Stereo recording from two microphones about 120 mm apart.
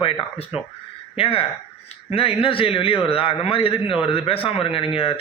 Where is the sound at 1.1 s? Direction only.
50° left (ahead or behind).